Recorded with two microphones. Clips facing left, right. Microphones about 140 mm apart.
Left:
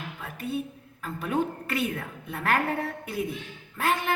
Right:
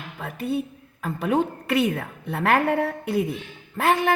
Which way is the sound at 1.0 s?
75° right (ahead or behind).